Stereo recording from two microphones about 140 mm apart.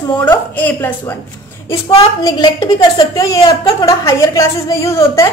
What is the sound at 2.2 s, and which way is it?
A woman's voice, 30° left (ahead or behind).